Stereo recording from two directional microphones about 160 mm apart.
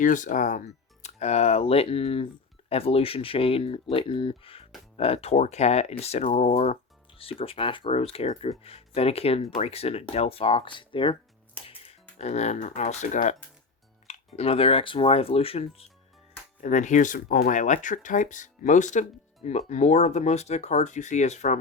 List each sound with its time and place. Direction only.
0.0 s speech: 55° left (ahead or behind); by 11.2 s 30° left (ahead or behind)
11.7 s speech: 40° left (ahead or behind)
16.6 s speech: 50° left (ahead or behind)